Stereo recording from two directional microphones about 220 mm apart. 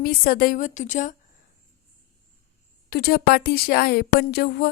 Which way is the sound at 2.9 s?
45° left (ahead or behind).